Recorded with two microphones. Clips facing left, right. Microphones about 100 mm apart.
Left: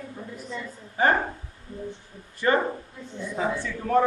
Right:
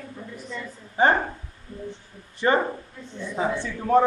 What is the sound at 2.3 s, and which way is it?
Speech, 25° right (ahead or behind).